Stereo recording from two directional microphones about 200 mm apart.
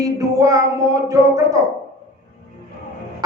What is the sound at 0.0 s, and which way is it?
Speech, 15° right (ahead or behind).